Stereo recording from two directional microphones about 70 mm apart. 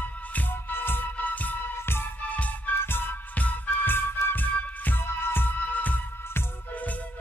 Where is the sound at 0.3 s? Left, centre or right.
Left.